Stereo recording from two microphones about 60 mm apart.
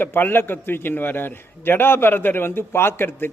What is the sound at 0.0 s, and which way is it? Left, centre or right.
A man's voice, left.